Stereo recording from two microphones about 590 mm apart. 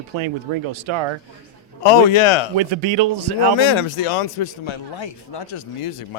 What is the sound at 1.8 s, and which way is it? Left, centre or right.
Speech, left.